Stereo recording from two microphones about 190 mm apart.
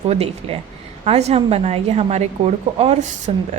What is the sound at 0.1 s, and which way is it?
A woman's voice, 30° right (ahead or behind).